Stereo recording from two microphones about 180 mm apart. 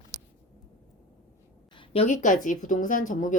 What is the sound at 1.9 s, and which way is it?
Speech, 35° left (ahead or behind).